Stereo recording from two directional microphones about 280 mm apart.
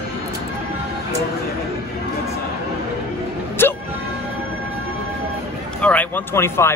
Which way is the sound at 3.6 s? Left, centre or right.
Centre.